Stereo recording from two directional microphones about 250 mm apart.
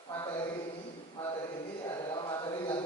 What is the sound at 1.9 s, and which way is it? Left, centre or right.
Mantra, centre.